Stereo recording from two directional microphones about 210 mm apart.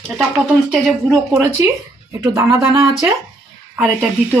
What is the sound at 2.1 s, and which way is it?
Speech, 15° right (ahead or behind).